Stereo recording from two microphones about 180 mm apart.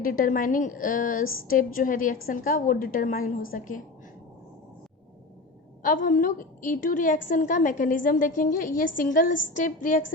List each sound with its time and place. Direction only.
0.0 s a woman's voice: 50° left (ahead or behind)
5.8 s a woman's voice: 50° left (ahead or behind)